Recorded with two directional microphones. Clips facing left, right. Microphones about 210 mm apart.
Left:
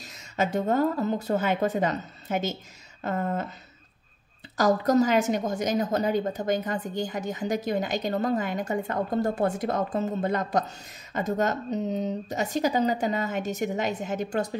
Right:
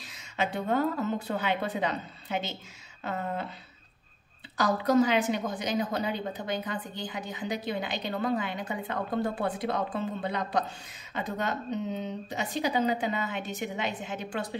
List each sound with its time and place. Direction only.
0.0 s a woman's voice: 40° left (ahead or behind)
4.6 s a woman's voice: 45° left (ahead or behind)